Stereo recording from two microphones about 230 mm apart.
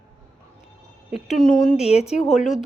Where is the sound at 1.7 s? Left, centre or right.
Left.